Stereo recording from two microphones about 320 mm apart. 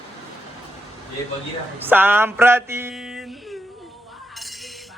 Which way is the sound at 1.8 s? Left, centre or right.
Centre.